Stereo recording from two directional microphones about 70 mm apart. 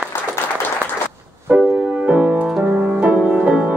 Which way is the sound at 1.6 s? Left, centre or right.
Centre.